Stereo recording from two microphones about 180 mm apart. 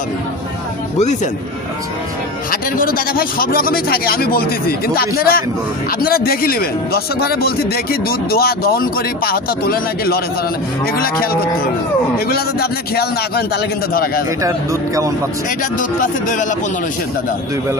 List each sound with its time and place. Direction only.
0.9 s a man's voice: 40° left (ahead or behind)
2.5 s a man's voice: 50° left (ahead or behind)
14.3 s speech: 15° right (ahead or behind)
15.4 s speech: 45° left (ahead or behind)